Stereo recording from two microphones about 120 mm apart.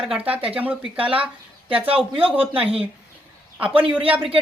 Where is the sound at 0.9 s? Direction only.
50° right (ahead or behind).